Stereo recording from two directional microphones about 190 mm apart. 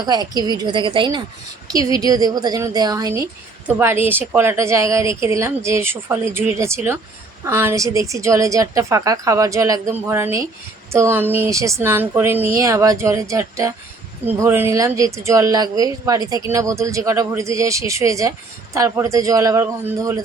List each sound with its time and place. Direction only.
0.0 s a woman's voice: 20° right (ahead or behind)